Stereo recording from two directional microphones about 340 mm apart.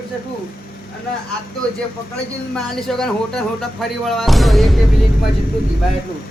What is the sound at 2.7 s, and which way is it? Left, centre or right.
Speech, centre.